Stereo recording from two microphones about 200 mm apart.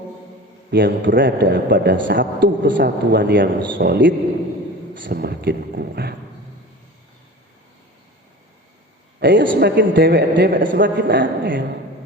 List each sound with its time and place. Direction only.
0.7 s a man's voice: 60° right (ahead or behind)
9.2 s a man's voice: 65° right (ahead or behind)
9.6 s a man's voice: 55° right (ahead or behind)
10.8 s a man's voice: 60° right (ahead or behind)